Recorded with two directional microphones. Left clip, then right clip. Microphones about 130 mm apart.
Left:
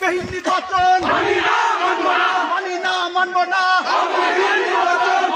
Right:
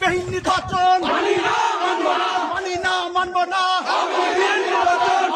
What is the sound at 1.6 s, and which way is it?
Crowd, 60° right (ahead or behind).